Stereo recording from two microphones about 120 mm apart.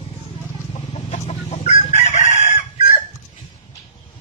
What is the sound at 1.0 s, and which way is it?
Chicken, 75° left (ahead or behind).